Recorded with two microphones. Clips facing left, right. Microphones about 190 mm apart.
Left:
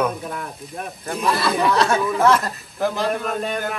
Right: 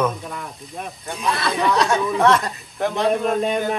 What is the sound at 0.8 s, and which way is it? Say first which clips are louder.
Speech: left 3 dB; centre (ahead or behind).